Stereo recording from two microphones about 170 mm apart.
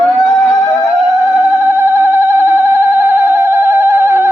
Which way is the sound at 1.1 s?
15° right (ahead or behind).